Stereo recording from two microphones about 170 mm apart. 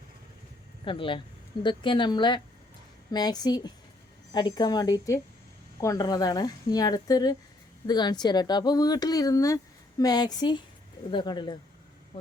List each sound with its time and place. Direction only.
0.9 s speech: 30° left (ahead or behind)